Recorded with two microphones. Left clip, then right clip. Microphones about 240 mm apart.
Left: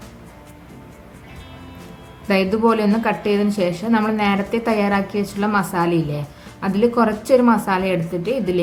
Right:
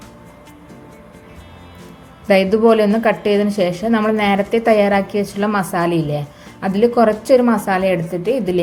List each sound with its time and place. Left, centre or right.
2.2 s a woman's voice: centre
5.9 s a woman's voice: left
6.6 s a woman's voice: centre